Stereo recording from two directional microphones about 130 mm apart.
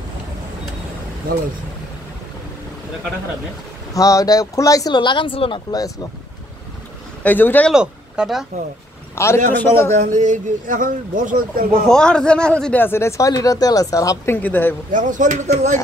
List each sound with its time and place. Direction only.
3.9 s speech: 25° left (ahead or behind); by 5.6 s 40° left (ahead or behind)
7.2 s a man's voice: 15° left (ahead or behind)
7.7 s speech: 5° right (ahead or behind)
9.1 s a man's voice: 20° left (ahead or behind)
9.9 s speech: 65° right (ahead or behind); by 11.8 s 90° right
11.9 s a man's voice: 5° left (ahead or behind)
12.8 s speech: 20° left (ahead or behind)
14.9 s speech: 85° right; by 15.8 s 65° right (ahead or behind)